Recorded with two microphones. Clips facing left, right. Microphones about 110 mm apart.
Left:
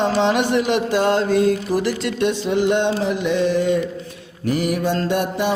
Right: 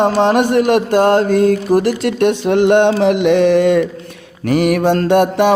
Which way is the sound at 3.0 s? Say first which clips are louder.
Right 8 dB; 70° right (ahead or behind).